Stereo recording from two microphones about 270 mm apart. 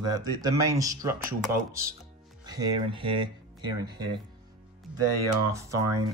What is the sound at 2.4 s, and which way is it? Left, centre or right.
Speech, centre.